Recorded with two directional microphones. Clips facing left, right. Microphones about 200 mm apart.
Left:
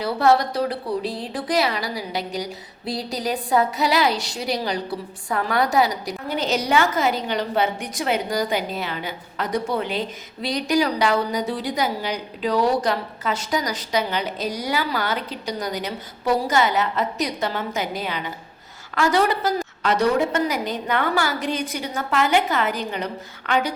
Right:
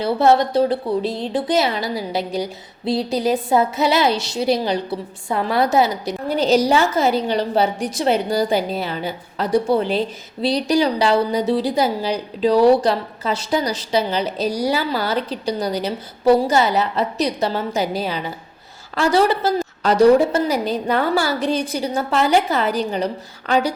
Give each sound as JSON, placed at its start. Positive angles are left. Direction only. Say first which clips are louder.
{"t": 0.0, "sound": "a woman's voice", "louder": "right 3 dB", "side_deg": -25}